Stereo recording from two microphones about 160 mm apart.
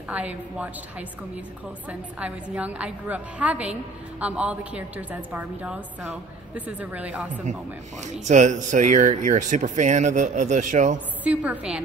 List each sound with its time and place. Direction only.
0.1 s a woman's voice: 10° right (ahead or behind)
1.9 s a woman's voice: 10° right (ahead or behind)
8.0 s speech: 50° right (ahead or behind)
11.2 s a woman's voice: 10° right (ahead or behind)